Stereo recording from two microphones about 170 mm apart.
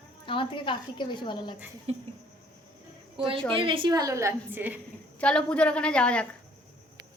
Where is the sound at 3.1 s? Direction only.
30° right (ahead or behind); by 4.8 s 10° right (ahead or behind).